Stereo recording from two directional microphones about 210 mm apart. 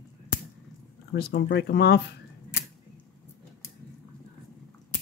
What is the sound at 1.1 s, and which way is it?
Speech, 50° left (ahead or behind).